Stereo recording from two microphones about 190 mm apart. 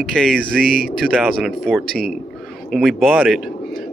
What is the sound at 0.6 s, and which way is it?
Speech, 50° right (ahead or behind).